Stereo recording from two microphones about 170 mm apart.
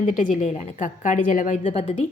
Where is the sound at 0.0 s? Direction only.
40° left (ahead or behind).